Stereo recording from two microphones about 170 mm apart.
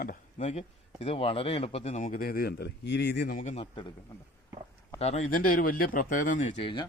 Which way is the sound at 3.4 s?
40° left (ahead or behind).